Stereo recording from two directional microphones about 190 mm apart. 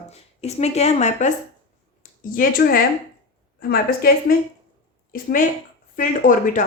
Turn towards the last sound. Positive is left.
turn(degrees=45)  # may be behind; listen again after turning